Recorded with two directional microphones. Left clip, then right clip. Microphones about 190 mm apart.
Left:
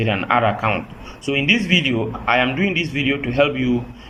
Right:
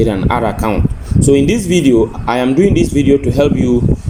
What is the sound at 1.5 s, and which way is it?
Speech, 45° right (ahead or behind).